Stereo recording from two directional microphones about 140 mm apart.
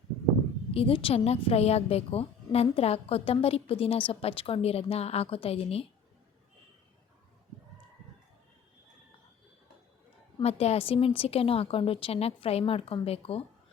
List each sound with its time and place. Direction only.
0.7 s a woman's voice: 40° left (ahead or behind)
10.4 s a woman's voice: 50° left (ahead or behind)